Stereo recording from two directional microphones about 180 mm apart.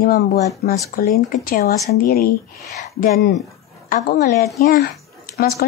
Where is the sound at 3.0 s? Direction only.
55° left (ahead or behind).